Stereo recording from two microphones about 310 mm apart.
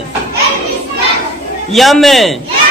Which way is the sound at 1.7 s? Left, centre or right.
Centre.